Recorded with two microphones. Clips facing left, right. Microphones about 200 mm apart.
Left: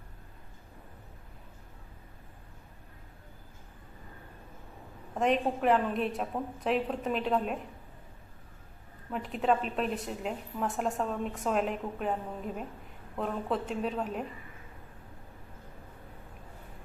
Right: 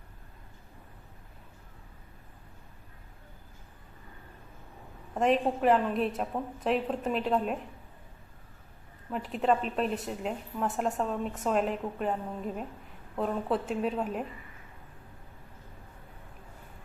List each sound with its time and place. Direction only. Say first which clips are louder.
5.2 s a woman's voice: right 2 dB; centre (ahead or behind)
9.0 s a woman's voice: right 1 dB; centre (ahead or behind)
13.1 s a woman's voice: right 2 dB; centre (ahead or behind)